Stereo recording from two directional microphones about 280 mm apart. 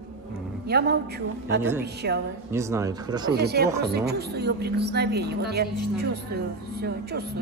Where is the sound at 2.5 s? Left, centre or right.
Centre.